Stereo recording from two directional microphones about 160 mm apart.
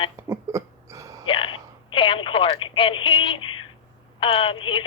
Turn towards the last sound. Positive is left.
turn(degrees=30)  # may be behind; listen again after turning